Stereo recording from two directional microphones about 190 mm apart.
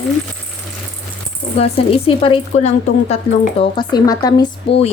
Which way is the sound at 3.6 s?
25° left (ahead or behind).